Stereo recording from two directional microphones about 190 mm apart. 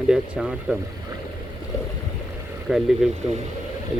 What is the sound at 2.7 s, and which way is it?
Speech, centre (ahead or behind).